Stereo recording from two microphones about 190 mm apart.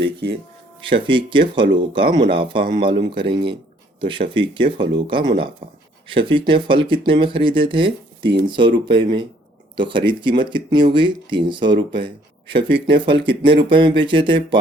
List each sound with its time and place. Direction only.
0.0 s speech: 65° right (ahead or behind)
0.8 s speech: 25° right (ahead or behind)